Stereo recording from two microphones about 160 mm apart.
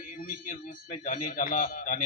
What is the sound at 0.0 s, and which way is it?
A man's voice, 60° left (ahead or behind).